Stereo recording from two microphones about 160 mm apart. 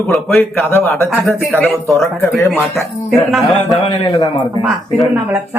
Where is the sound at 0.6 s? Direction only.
15° left (ahead or behind).